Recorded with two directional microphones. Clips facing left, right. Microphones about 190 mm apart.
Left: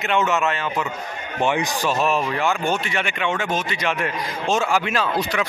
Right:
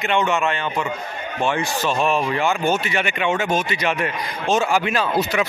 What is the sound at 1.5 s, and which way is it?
Speech, 15° left (ahead or behind).